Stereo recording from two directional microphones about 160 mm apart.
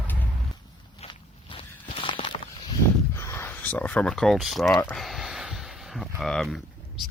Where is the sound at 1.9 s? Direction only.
35° left (ahead or behind).